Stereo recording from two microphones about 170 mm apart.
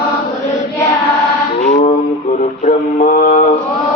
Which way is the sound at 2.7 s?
55° left (ahead or behind).